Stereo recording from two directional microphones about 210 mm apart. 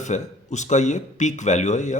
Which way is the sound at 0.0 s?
35° left (ahead or behind).